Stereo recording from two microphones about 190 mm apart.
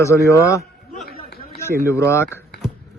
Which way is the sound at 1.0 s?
55° left (ahead or behind).